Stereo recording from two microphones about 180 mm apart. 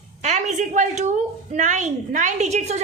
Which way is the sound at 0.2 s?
40° right (ahead or behind).